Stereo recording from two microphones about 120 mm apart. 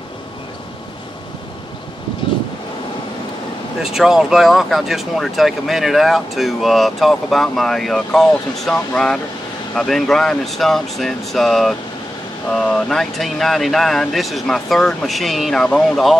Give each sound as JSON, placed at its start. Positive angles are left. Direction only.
{"t": 3.8, "sound": "speech", "side_deg": -5}